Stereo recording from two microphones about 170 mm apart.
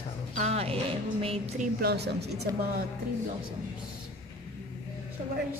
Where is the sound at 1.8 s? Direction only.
75° right (ahead or behind).